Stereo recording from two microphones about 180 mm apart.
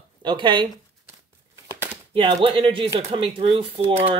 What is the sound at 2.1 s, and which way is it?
Speech, 30° right (ahead or behind).